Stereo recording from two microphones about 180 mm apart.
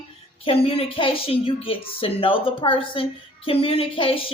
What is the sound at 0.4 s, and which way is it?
A woman's voice, 30° left (ahead or behind).